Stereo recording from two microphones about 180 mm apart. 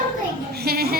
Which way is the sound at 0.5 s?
60° right (ahead or behind).